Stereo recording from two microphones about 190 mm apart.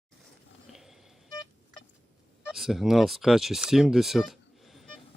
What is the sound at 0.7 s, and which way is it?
Toot, centre (ahead or behind).